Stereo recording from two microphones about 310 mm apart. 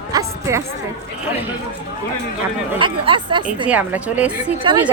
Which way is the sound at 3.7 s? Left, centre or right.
Centre.